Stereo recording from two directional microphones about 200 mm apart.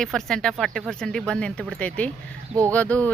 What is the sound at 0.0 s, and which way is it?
Speech, 5° left (ahead or behind).